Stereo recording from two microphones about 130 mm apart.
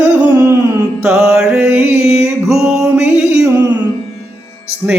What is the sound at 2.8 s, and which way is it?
Music, 20° right (ahead or behind).